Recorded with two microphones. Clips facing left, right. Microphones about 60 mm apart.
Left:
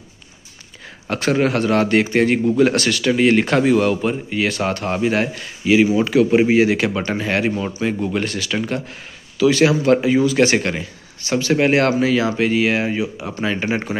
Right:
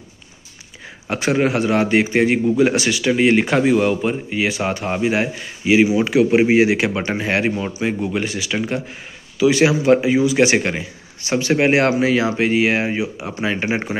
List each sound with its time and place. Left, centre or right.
1.0 s a man's voice: centre
7.5 s speech: centre